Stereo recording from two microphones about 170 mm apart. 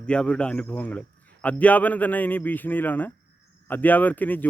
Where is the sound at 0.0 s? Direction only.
5° left (ahead or behind).